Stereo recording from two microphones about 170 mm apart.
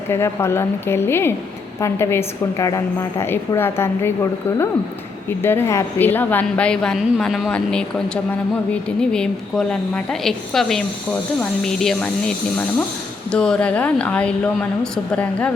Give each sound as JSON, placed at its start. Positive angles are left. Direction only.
{"t": 0.1, "sound": "a woman's voice", "side_deg": 15}